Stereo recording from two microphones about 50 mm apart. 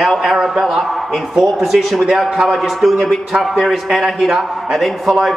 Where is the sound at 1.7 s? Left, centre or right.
Centre.